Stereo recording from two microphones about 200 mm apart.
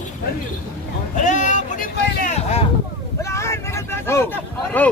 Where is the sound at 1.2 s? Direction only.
40° left (ahead or behind).